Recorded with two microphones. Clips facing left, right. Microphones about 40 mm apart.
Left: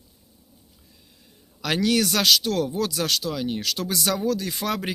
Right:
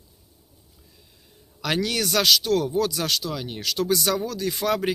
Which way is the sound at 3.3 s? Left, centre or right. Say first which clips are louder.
Left 5 dB; centre.